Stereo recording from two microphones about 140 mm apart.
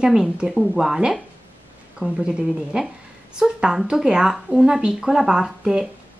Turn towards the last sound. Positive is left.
turn(degrees=-5)  # may be behind; listen again after turning